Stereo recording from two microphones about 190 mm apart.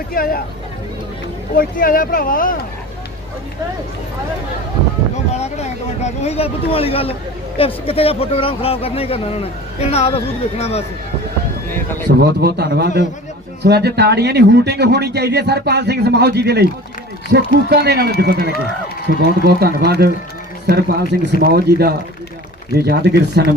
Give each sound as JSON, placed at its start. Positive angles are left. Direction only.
{"t": 0.1, "sound": "speech", "side_deg": 50}
{"t": 1.5, "sound": "speech", "side_deg": 45}
{"t": 5.1, "sound": "speech", "side_deg": 35}
{"t": 12.0, "sound": "speech", "side_deg": -55}